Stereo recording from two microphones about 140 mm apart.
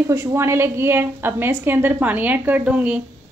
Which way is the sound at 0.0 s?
20° right (ahead or behind).